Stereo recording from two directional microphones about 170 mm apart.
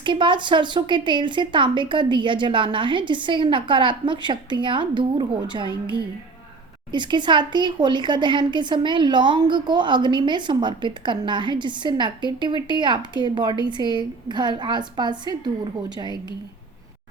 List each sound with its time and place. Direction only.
0.0 s speech: 30° right (ahead or behind)
6.9 s speech: 25° right (ahead or behind)